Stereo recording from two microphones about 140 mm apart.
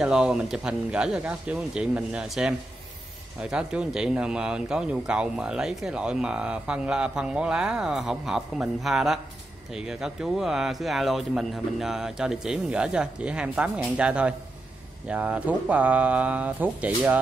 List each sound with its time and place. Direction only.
0.0 s speech: 5° right (ahead or behind)